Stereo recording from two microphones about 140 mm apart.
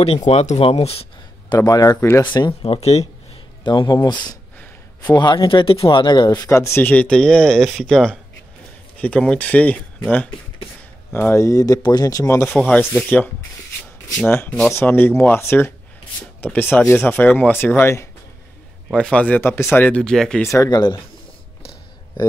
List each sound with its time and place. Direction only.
0.0 s speech: 45° left (ahead or behind)
1.6 s speech: 25° left (ahead or behind)
2.2 s speech: 35° left (ahead or behind)
3.6 s speech: 30° left (ahead or behind); by 10.0 s 10° left (ahead or behind)
11.1 s speech: 20° left (ahead or behind)
12.4 s speech: centre (ahead or behind)
14.3 s speech: 15° left (ahead or behind)
18.9 s speech: 5° left (ahead or behind)
20.6 s speech: 30° left (ahead or behind)